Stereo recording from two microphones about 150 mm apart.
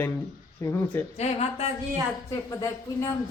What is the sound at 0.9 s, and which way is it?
Speech, 15° left (ahead or behind).